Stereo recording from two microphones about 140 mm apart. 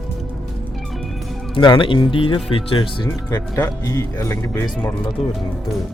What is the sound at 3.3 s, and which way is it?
Speech, 20° left (ahead or behind).